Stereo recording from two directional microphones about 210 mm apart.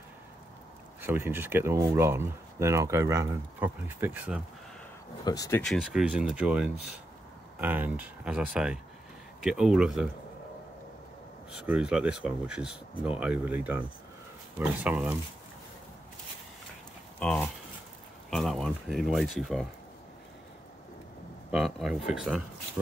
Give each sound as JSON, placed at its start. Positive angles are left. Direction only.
{"t": 1.0, "sound": "speech", "side_deg": -10}
{"t": 5.2, "sound": "speech", "side_deg": 15}
{"t": 5.6, "sound": "speech", "side_deg": 0}
{"t": 11.6, "sound": "speech", "side_deg": -5}
{"t": 17.2, "sound": "speech", "side_deg": 5}
{"t": 21.5, "sound": "speech", "side_deg": 0}